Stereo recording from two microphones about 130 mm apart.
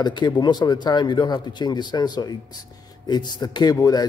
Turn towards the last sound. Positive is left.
turn(degrees=30)  # may be behind; listen again after turning